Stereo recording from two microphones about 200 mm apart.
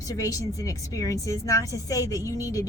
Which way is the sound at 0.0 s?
15° left (ahead or behind).